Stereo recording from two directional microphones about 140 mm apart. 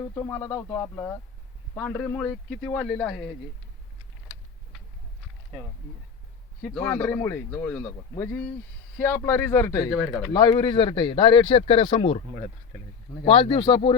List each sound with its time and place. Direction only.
0.1 s speech: 20° left (ahead or behind)
6.6 s a man's voice: 10° left (ahead or behind); by 12.2 s 45° left (ahead or behind)
13.2 s a man's voice: 40° left (ahead or behind)